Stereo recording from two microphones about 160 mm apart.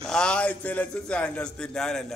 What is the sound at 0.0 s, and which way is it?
A man's voice, 5° left (ahead or behind).